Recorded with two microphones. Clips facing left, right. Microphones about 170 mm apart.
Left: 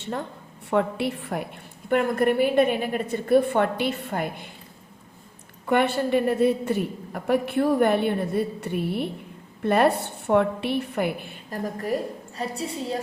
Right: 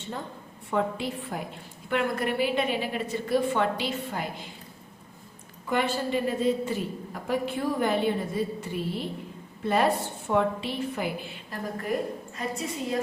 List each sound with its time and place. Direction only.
0.7 s a woman's voice: 65° left (ahead or behind)
1.9 s a woman's voice: 50° left (ahead or behind)
5.6 s a woman's voice: 65° left (ahead or behind); by 11.9 s 45° left (ahead or behind)
12.4 s a woman's voice: 35° left (ahead or behind)